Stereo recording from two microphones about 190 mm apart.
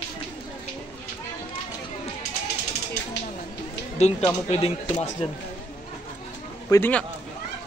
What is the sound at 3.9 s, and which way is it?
Speech, 35° left (ahead or behind).